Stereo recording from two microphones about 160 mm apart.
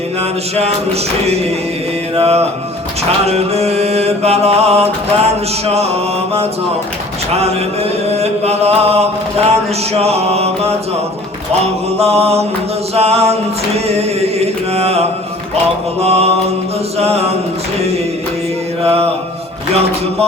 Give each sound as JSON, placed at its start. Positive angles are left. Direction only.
{"t": 2.1, "sound": "mantra", "side_deg": -40}
{"t": 8.1, "sound": "chant", "side_deg": -40}
{"t": 9.5, "sound": "mantra", "side_deg": -40}
{"t": 13.7, "sound": "music", "side_deg": -40}
{"t": 16.0, "sound": "mantra", "side_deg": -40}
{"t": 18.8, "sound": "mantra", "side_deg": -40}